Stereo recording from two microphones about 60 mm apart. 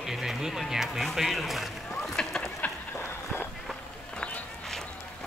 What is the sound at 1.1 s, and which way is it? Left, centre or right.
Boat, centre.